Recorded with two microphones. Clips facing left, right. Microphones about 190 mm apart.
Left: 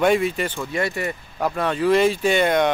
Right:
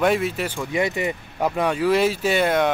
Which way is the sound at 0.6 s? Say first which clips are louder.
Right 2 dB; 15° right (ahead or behind).